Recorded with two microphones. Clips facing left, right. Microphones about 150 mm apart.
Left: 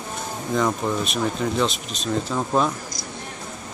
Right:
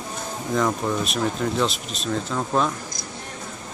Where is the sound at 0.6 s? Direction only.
Centre (ahead or behind).